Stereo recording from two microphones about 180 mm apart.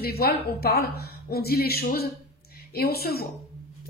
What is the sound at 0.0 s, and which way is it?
A woman's voice, 60° left (ahead or behind).